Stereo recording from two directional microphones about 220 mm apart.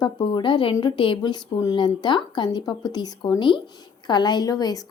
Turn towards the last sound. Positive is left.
turn(degrees=15)  # may be behind; listen again after turning